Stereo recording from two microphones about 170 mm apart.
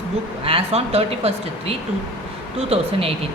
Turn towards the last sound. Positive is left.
turn(degrees=-35)  # may be behind; listen again after turning